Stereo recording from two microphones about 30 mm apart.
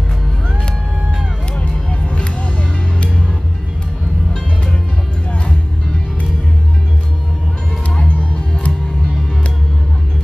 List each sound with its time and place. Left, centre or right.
1.6 s music: left
8.1 s music: left